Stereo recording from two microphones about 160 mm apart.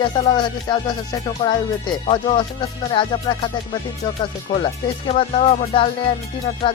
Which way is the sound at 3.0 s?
30° left (ahead or behind).